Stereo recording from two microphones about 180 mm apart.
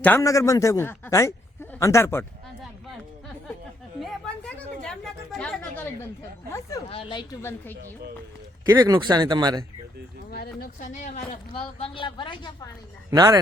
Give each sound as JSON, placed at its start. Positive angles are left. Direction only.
{"t": 0.0, "sound": "a man's voice", "side_deg": 15}
{"t": 4.0, "sound": "chatter", "side_deg": 5}
{"t": 6.5, "sound": "speech", "side_deg": 20}
{"t": 8.6, "sound": "speech", "side_deg": -20}
{"t": 10.3, "sound": "speech", "side_deg": 60}
{"t": 11.3, "sound": "speech", "side_deg": 30}
{"t": 13.1, "sound": "speech", "side_deg": -20}